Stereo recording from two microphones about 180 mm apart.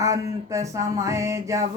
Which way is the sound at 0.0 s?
15° right (ahead or behind).